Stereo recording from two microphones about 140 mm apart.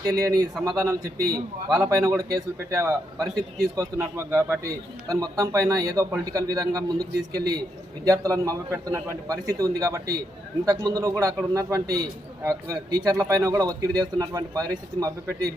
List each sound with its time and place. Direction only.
0.0 s a man's voice: 25° right (ahead or behind)